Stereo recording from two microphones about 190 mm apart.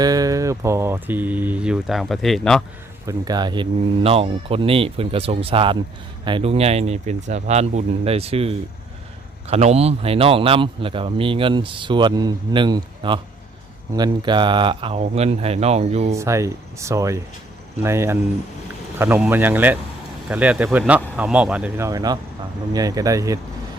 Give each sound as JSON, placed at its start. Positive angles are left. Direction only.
{"t": 0.0, "sound": "speech", "side_deg": -20}
{"t": 3.1, "sound": "speech", "side_deg": -20}
{"t": 16.1, "sound": "speech", "side_deg": -15}